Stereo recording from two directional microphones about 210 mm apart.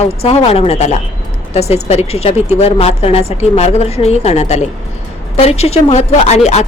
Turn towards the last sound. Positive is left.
turn(degrees=30)  # may be behind; listen again after turning